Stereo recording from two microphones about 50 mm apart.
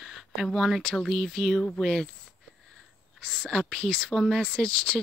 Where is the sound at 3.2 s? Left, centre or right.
Centre.